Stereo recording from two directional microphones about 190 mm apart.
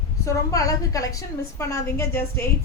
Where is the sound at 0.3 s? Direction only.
15° left (ahead or behind).